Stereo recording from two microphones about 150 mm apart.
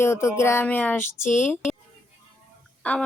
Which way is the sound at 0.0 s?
20° left (ahead or behind).